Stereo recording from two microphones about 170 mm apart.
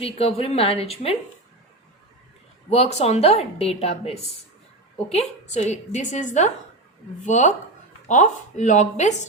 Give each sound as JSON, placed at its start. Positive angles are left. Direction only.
{"t": 0.0, "sound": "a woman's voice", "side_deg": 35}
{"t": 2.6, "sound": "a woman's voice", "side_deg": 40}